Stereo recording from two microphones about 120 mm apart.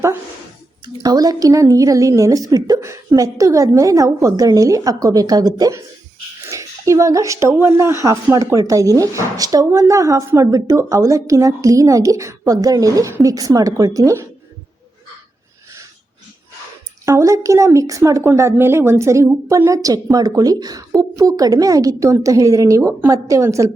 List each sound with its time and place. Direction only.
1.0 s speech: 30° right (ahead or behind)
17.1 s speech: 25° right (ahead or behind)